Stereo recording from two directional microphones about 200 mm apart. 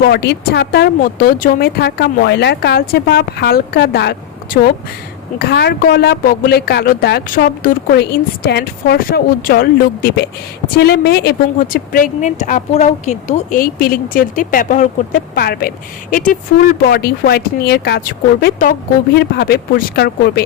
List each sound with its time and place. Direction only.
0.1 s speech: 55° left (ahead or behind)